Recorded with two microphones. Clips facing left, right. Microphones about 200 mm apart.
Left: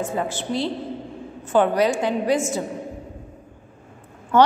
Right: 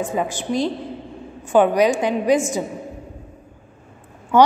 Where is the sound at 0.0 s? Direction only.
15° right (ahead or behind).